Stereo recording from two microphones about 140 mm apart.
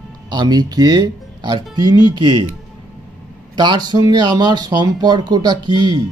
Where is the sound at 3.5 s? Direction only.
30° right (ahead or behind).